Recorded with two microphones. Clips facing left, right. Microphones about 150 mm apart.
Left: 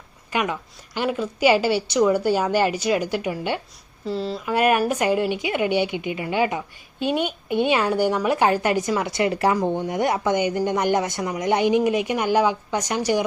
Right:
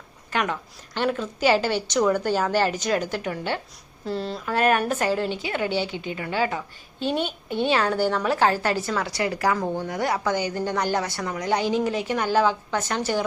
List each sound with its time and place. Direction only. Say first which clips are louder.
0.3 s a woman's voice: left 2 dB; 10° left (ahead or behind)
4.0 s speech: left 2 dB; centre (ahead or behind)
4.5 s a woman's voice: left 2 dB; 10° left (ahead or behind)